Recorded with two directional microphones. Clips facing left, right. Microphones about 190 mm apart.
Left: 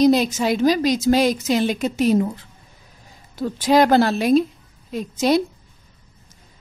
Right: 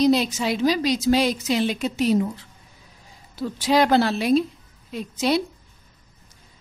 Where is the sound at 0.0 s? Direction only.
45° left (ahead or behind).